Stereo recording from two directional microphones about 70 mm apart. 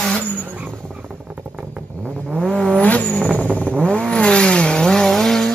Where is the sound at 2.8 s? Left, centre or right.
Left.